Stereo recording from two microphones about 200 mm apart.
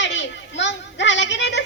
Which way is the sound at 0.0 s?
65° left (ahead or behind).